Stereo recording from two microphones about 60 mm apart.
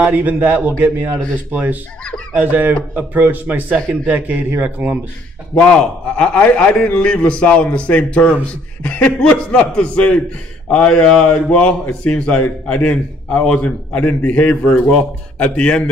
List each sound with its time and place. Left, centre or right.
0.0 s a man's voice: right
6.1 s a man's voice: left